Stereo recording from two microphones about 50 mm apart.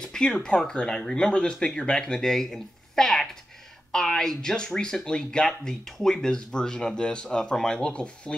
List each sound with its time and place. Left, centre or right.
0.0 s speech: centre